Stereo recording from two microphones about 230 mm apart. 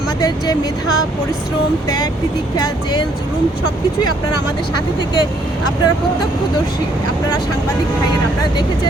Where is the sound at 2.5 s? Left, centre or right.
Centre.